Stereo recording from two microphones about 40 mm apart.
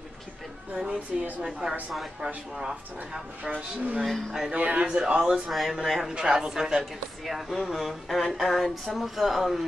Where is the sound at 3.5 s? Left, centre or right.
Right.